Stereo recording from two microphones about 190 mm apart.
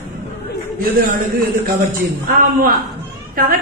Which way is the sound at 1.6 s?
50° right (ahead or behind).